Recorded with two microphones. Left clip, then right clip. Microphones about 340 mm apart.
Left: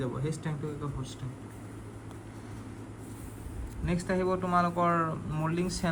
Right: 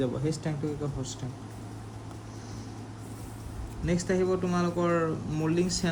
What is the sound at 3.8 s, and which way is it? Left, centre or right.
Speech, centre.